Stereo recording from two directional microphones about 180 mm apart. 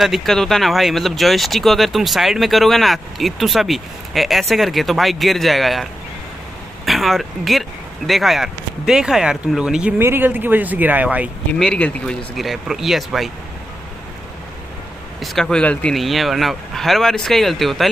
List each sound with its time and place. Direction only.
0.0 s speech: centre (ahead or behind)
6.9 s speech: centre (ahead or behind)
11.5 s speech: 5° left (ahead or behind)
15.1 s speech: centre (ahead or behind)